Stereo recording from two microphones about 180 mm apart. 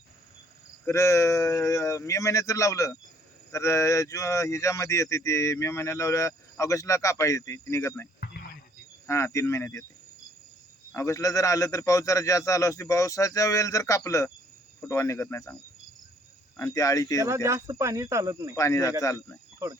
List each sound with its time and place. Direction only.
0.9 s speech: 15° left (ahead or behind)
9.0 s speech: 15° left (ahead or behind)
10.9 s speech: 15° left (ahead or behind)
16.6 s speech: 20° left (ahead or behind)
17.2 s speech: 15° right (ahead or behind)
18.5 s speech: 15° left (ahead or behind)
19.6 s speech: 15° right (ahead or behind)